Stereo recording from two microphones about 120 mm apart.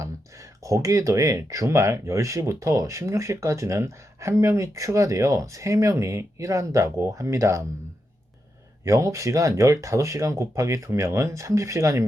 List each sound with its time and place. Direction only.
0.6 s speech: 25° right (ahead or behind)
8.8 s speech: 25° right (ahead or behind)